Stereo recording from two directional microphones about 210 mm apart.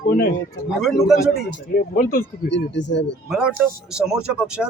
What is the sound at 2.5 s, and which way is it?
Speech, 55° left (ahead or behind).